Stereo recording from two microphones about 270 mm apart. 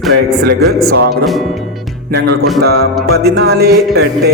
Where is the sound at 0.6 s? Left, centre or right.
Right.